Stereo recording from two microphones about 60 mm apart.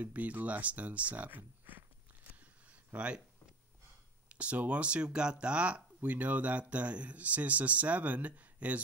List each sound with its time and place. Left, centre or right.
0.0 s speech: right
2.7 s a sound: right
4.3 s speech: right